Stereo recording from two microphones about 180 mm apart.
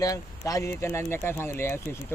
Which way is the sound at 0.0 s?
20° left (ahead or behind).